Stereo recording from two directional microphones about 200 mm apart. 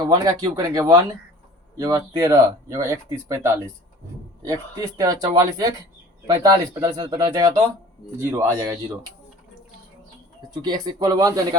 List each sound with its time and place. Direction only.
0.0 s speech: 20° right (ahead or behind)
10.5 s speech: 20° right (ahead or behind)